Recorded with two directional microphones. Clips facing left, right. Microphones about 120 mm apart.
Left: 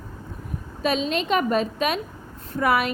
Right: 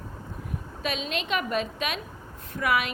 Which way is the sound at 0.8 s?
35° left (ahead or behind).